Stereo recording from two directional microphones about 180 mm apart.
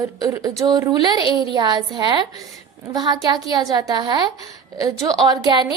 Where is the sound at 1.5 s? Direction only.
25° right (ahead or behind).